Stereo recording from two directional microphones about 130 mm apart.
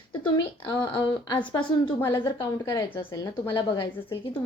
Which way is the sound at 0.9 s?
35° left (ahead or behind).